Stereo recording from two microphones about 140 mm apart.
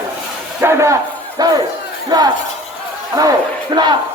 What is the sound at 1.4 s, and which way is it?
A man's voice, 30° right (ahead or behind).